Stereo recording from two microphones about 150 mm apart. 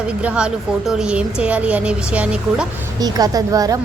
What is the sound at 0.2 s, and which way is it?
A woman's voice, 10° right (ahead or behind).